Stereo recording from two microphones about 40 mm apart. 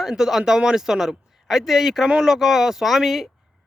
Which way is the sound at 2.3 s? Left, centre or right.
Centre.